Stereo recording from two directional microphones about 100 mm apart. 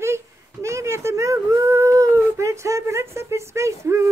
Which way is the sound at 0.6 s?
30° right (ahead or behind).